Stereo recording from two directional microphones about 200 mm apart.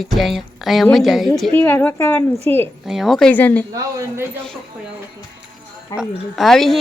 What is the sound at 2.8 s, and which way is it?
Speech, centre (ahead or behind).